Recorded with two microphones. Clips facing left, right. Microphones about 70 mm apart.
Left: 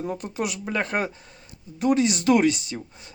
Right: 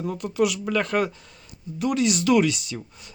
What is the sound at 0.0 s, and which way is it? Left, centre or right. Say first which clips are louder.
Speech: right 5 dB; left.